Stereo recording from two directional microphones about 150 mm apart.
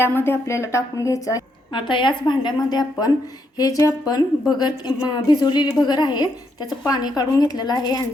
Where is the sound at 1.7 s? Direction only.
35° left (ahead or behind).